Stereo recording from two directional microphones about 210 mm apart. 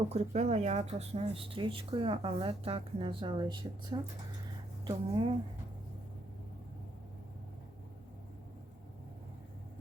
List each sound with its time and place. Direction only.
0.1 s speech: 30° right (ahead or behind)